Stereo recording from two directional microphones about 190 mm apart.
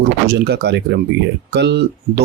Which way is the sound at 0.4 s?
60° right (ahead or behind).